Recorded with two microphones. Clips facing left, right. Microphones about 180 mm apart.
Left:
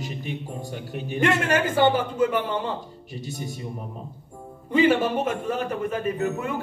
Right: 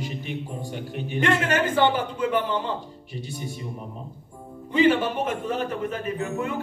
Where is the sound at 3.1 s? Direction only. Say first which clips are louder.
Left 1 dB; 40° left (ahead or behind).